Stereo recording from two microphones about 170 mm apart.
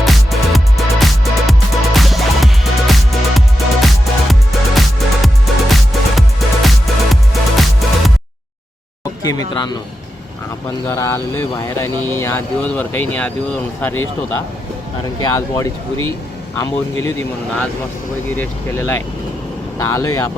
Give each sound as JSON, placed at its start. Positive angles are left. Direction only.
{"t": 0.0, "sound": "music", "side_deg": 0}
{"t": 9.2, "sound": "speech", "side_deg": 25}
{"t": 10.8, "sound": "speech", "side_deg": 15}
{"t": 18.3, "sound": "speech", "side_deg": 15}